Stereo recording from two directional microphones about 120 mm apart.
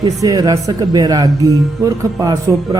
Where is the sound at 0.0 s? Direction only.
30° right (ahead or behind).